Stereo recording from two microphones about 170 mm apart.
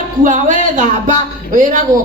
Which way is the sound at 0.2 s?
50° right (ahead or behind).